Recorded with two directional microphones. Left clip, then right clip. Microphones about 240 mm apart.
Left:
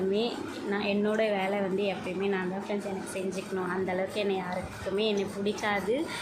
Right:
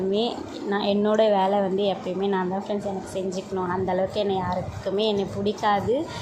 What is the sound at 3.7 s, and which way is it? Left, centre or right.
A woman's voice, centre.